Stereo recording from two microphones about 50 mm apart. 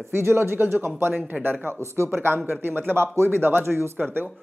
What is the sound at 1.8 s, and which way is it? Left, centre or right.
Speech, right.